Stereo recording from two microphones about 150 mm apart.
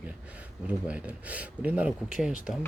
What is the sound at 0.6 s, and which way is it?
Speech, 10° right (ahead or behind).